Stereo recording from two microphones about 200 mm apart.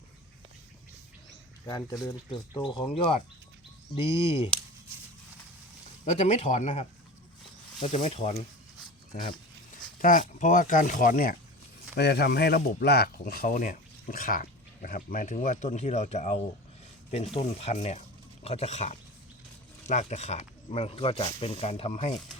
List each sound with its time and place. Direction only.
1.6 s speech: 20° left (ahead or behind)
6.1 s speech: 35° left (ahead or behind)
10.0 s speech: 40° left (ahead or behind)
11.9 s speech: 55° left (ahead or behind); by 22.1 s 30° left (ahead or behind)